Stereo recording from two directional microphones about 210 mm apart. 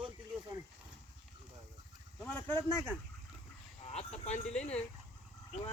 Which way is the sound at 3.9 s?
30° left (ahead or behind).